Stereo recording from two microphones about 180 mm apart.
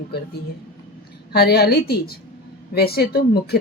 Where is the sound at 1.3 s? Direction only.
60° left (ahead or behind).